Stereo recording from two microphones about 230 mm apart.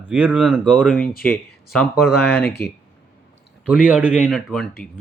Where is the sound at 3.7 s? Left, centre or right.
Centre.